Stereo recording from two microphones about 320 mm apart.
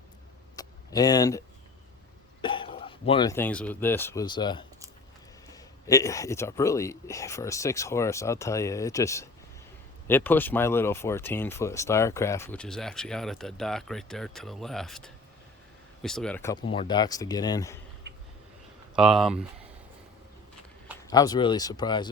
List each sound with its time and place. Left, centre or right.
0.5 s a sound: centre
2.4 s speech: centre
18.9 s speech: centre
21.1 s speech: centre